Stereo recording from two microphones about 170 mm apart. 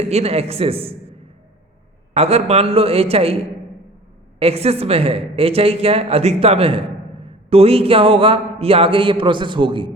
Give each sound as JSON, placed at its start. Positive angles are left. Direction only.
{"t": 0.1, "sound": "a man's voice", "side_deg": -40}
{"t": 2.1, "sound": "a man's voice", "side_deg": -35}
{"t": 4.4, "sound": "a man's voice", "side_deg": -35}